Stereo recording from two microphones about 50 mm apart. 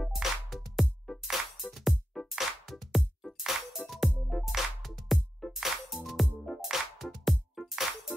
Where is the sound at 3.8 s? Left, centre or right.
Centre.